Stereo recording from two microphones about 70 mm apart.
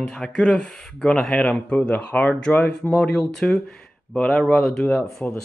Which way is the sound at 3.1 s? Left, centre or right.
Centre.